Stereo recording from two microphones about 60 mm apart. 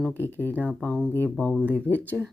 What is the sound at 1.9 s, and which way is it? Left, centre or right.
Speech, left.